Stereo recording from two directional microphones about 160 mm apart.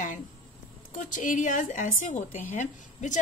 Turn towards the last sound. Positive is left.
turn(degrees=50)  # may be behind; listen again after turning